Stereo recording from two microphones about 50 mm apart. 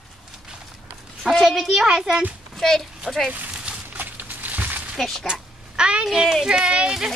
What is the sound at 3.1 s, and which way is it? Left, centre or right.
Speech, centre.